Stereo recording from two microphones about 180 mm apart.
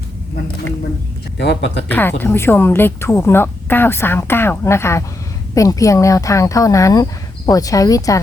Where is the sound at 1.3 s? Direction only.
75° left (ahead or behind).